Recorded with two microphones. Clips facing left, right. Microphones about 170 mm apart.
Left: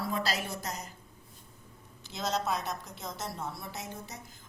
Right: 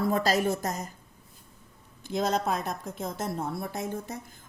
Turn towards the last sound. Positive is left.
turn(degrees=-50)  # may be behind; listen again after turning